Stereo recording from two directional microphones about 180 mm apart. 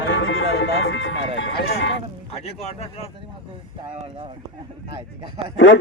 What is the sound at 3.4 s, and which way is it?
Speech, 30° right (ahead or behind).